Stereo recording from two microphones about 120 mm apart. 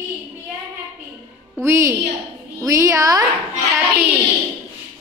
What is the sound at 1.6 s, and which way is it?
A woman's voice, 25° right (ahead or behind).